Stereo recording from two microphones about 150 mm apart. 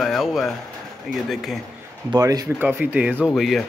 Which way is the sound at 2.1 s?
25° right (ahead or behind).